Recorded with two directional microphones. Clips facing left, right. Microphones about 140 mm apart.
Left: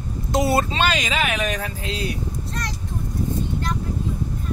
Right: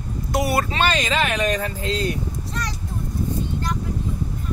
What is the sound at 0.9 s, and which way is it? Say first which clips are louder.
Speech: right 1 dB; 10° left (ahead or behind).